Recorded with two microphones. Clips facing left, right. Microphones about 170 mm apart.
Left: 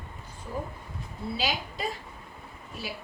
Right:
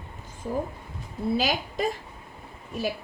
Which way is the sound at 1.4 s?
45° right (ahead or behind).